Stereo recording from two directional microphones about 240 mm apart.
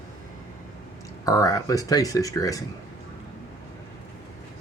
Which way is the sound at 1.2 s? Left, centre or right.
Centre.